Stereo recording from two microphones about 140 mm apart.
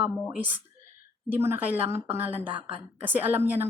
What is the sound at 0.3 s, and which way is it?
Speech, 10° right (ahead or behind).